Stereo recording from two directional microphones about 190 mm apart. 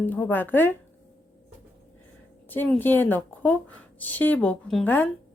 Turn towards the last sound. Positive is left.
turn(degrees=10)  # may be behind; listen again after turning